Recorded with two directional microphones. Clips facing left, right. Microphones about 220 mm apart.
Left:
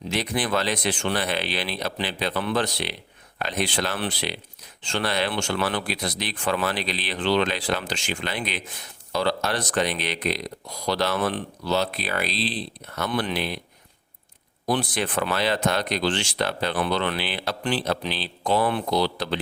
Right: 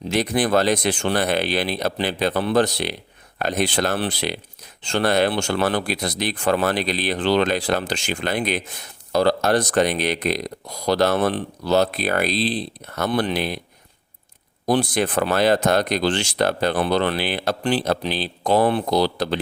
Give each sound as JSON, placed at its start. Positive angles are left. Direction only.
{"t": 0.1, "sound": "speech", "side_deg": -45}
{"t": 14.7, "sound": "speech", "side_deg": -40}